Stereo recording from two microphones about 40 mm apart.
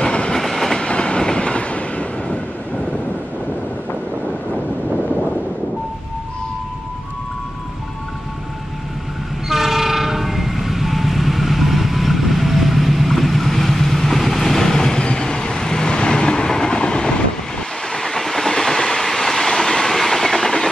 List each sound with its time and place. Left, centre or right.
0.0 s train: left
0.4 s train: centre
0.7 s train: left
9.5 s train: centre; by 17.1 s left
17.9 s train: centre